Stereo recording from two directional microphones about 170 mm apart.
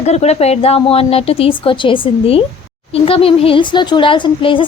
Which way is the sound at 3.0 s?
35° left (ahead or behind).